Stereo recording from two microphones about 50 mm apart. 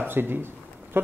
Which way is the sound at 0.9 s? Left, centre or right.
Right.